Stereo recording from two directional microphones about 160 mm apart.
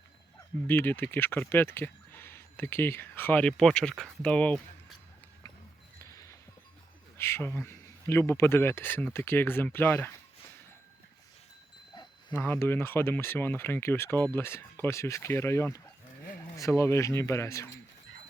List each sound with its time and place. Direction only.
0.7 s speech: 15° left (ahead or behind)
6.0 s a sound: 20° left (ahead or behind)
7.2 s speech: 15° left (ahead or behind)
12.3 s speech: 10° left (ahead or behind)